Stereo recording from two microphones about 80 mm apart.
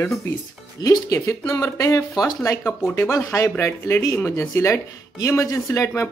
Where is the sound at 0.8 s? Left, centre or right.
Left.